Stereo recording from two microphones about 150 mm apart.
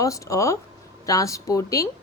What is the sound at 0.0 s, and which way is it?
A woman's voice, 20° left (ahead or behind).